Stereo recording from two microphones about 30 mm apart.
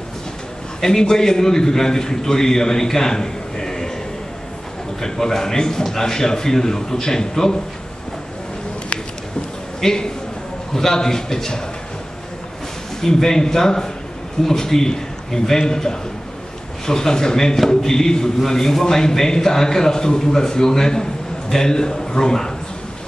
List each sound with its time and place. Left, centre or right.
0.7 s a man's voice: centre
5.0 s a man's voice: centre
9.8 s a man's voice: left
13.0 s a man's voice: centre